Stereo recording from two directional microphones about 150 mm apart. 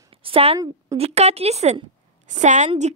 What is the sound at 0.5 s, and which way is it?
Speech, 25° right (ahead or behind).